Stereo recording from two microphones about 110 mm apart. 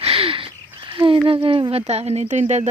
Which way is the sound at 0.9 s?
50° right (ahead or behind).